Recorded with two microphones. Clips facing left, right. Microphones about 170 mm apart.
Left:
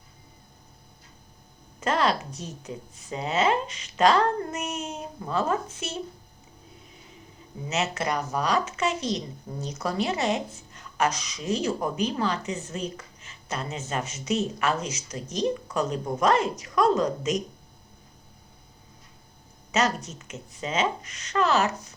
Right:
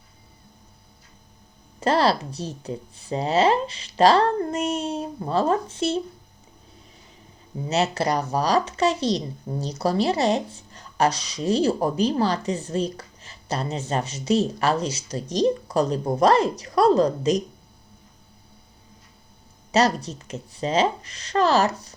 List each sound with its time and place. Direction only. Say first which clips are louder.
1.8 s a woman's voice: right 4 dB; 35° right (ahead or behind)
7.7 s a woman's voice: right 5 dB; 35° right (ahead or behind)
19.7 s a woman's voice: right 5 dB; 35° right (ahead or behind)